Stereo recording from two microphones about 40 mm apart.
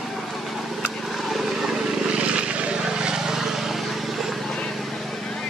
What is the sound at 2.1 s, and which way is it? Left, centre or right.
Vehicle, right.